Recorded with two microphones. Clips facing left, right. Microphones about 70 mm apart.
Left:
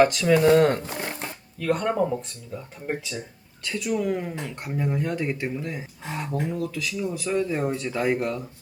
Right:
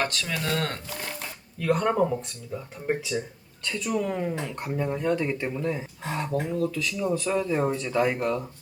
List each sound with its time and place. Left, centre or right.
0.0 s speech: centre
1.5 s speech: centre